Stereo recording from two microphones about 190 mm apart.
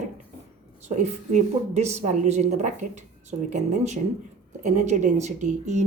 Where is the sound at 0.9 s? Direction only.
35° right (ahead or behind).